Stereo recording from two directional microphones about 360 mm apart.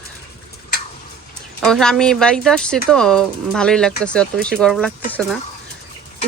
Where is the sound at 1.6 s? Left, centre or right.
Centre.